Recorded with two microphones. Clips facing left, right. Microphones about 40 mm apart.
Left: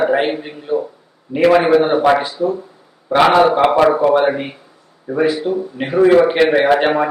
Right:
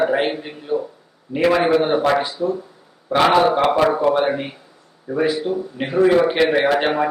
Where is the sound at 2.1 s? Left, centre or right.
Centre.